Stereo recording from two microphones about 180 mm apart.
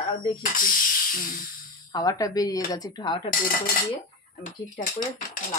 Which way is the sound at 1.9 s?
20° left (ahead or behind).